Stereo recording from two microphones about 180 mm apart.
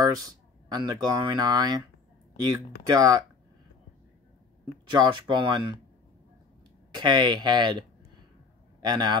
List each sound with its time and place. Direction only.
0.0 s speech: 20° right (ahead or behind)
2.9 s speech: 20° right (ahead or behind)
4.8 s speech: 25° right (ahead or behind)
7.0 s speech: 25° right (ahead or behind)
8.8 s speech: 25° right (ahead or behind)